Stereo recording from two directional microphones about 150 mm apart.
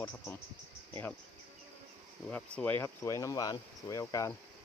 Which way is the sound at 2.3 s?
10° left (ahead or behind).